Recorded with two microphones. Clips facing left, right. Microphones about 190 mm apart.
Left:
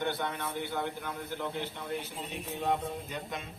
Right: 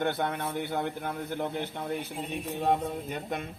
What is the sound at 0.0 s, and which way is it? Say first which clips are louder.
A man's voice: right 4 dB; 55° right (ahead or behind).